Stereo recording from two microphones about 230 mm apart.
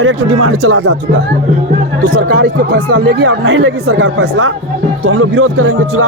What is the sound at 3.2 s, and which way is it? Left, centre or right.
Speech, right.